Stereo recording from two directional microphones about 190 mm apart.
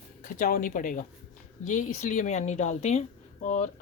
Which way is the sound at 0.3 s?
50° left (ahead or behind).